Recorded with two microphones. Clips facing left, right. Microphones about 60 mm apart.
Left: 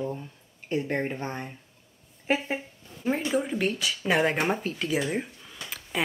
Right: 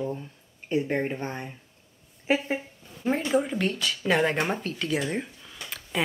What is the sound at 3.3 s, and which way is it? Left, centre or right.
Speech, centre.